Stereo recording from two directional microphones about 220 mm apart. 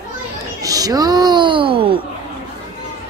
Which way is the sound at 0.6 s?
15° right (ahead or behind).